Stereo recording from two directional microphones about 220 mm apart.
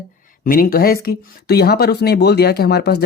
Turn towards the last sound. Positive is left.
turn(degrees=45)  # may be behind; listen again after turning